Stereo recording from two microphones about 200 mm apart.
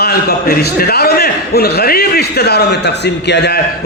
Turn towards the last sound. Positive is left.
turn(degrees=60)  # may be behind; listen again after turning